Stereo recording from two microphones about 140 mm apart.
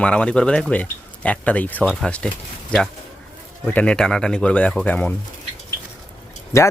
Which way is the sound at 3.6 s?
10° left (ahead or behind).